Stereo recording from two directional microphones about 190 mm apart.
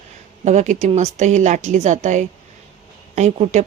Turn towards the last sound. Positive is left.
turn(degrees=-35)  # may be behind; listen again after turning